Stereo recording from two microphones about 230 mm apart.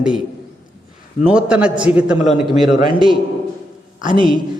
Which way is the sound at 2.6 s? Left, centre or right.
Centre.